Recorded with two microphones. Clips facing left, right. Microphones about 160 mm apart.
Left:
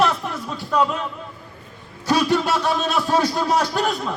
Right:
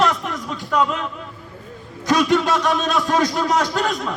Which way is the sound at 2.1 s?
10° left (ahead or behind).